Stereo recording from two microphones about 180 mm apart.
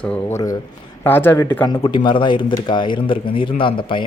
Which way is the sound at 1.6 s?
25° left (ahead or behind).